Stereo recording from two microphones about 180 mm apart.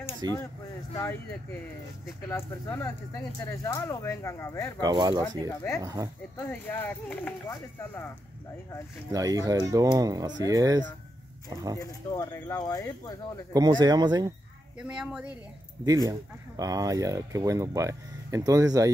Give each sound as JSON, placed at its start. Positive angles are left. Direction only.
{"t": 0.2, "sound": "speech", "side_deg": -20}
{"t": 2.2, "sound": "speech", "side_deg": 10}
{"t": 4.7, "sound": "speech", "side_deg": -20}
{"t": 5.5, "sound": "speech", "side_deg": 15}
{"t": 9.1, "sound": "speech", "side_deg": -20}
{"t": 11.8, "sound": "speech", "side_deg": 20}
{"t": 13.5, "sound": "speech", "side_deg": -20}
{"t": 14.8, "sound": "speech", "side_deg": -5}
{"t": 15.8, "sound": "speech", "side_deg": -20}